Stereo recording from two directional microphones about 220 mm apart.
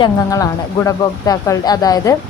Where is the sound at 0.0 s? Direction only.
15° left (ahead or behind).